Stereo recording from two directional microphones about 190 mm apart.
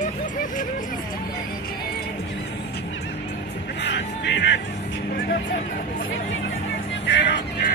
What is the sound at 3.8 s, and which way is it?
Music, 65° left (ahead or behind).